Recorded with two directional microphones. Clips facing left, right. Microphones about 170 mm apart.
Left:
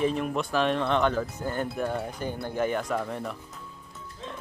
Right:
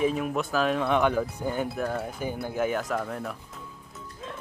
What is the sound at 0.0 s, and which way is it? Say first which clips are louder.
Speech: right 1 dB; 5° right (ahead or behind).